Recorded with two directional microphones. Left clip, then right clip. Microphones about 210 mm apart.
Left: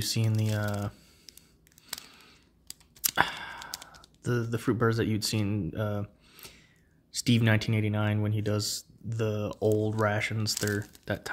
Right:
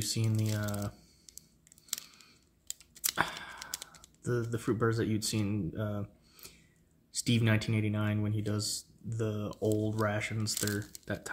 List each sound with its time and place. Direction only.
0.0 s speech: 40° left (ahead or behind)
2.0 s a sound: 40° left (ahead or behind)
3.0 s computer keyboard: 40° left (ahead or behind)
4.2 s speech: 40° left (ahead or behind)